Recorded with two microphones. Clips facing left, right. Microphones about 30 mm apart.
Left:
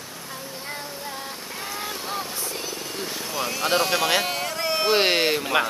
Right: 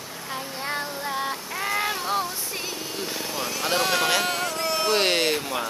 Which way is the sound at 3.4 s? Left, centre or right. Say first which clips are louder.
Left 2 dB; centre.